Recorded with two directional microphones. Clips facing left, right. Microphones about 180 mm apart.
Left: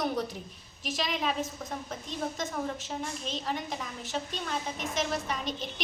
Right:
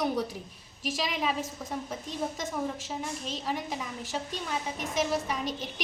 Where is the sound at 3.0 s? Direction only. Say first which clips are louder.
Even; 5° right (ahead or behind).